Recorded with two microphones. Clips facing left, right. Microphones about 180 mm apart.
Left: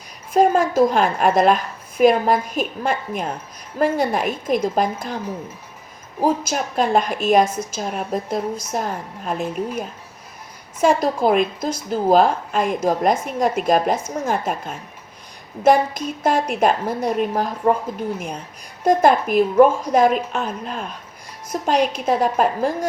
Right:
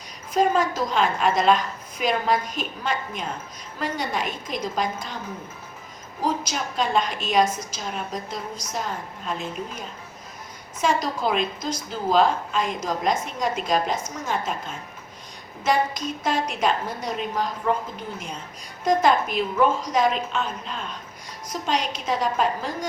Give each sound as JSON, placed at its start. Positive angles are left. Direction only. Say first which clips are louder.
{"t": 0.3, "sound": "a woman's voice", "louder": "left 6 dB", "side_deg": 50}
{"t": 6.2, "sound": "a woman's voice", "louder": "left 6 dB", "side_deg": 55}
{"t": 7.4, "sound": "a woman's voice", "louder": "left 2 dB", "side_deg": 30}
{"t": 7.8, "sound": "a woman's voice", "louder": "left 9 dB", "side_deg": 50}
{"t": 18.9, "sound": "a woman's voice", "louder": "left 5 dB", "side_deg": 55}